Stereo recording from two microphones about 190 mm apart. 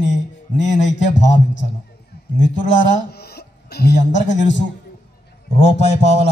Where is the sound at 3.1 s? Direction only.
60° left (ahead or behind).